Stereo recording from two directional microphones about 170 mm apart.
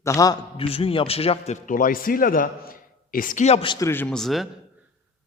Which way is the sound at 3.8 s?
15° left (ahead or behind).